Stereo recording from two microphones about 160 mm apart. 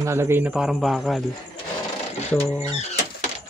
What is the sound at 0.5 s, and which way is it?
Speech, 5° right (ahead or behind).